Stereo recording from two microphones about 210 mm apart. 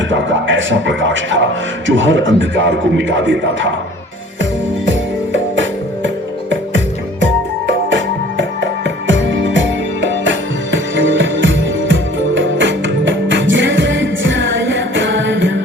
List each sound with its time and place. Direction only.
0.1 s a man's voice: 65° right (ahead or behind)
4.9 s music: 65° right (ahead or behind)